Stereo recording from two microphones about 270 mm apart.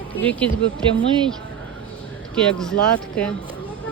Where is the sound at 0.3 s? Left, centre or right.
Centre.